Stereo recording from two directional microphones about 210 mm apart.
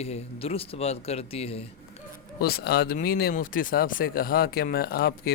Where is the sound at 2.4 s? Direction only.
50° left (ahead or behind).